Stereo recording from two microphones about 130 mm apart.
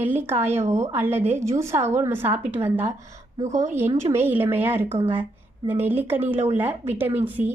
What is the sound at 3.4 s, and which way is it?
Speech, 65° right (ahead or behind).